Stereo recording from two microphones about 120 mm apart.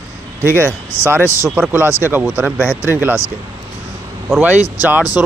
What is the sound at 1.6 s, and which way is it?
Speech, 15° right (ahead or behind).